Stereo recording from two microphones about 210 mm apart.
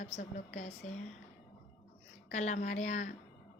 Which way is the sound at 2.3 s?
35° left (ahead or behind).